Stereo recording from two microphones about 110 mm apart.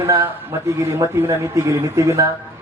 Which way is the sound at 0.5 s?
25° right (ahead or behind).